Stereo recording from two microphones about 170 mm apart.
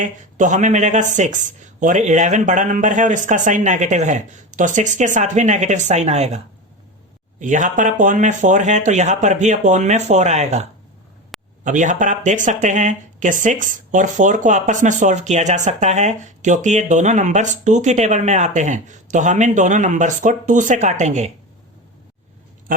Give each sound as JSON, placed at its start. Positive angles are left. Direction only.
{"t": 0.0, "sound": "speech", "side_deg": -45}